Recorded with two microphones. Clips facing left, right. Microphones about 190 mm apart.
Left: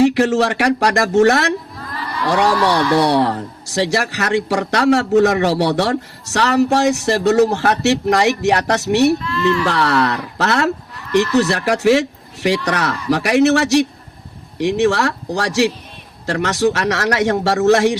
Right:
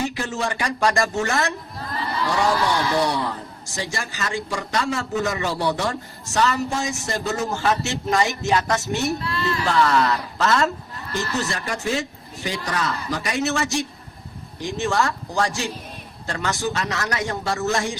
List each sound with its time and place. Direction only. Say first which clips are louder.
0.0 s a man's voice: left 12 dB; 75° left (ahead or behind)